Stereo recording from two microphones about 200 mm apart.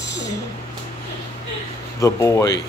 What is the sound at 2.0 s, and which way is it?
Speech, 15° left (ahead or behind).